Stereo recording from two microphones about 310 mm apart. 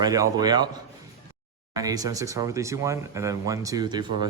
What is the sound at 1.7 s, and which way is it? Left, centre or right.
Speech, centre.